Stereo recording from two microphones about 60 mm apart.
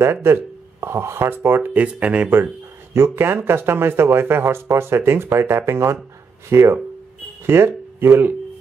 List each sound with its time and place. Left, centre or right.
0.0 s speech: right
1.7 s speech: right
2.9 s speech: right
7.4 s speech: right